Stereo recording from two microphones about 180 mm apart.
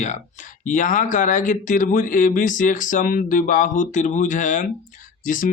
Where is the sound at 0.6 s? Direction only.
45° left (ahead or behind).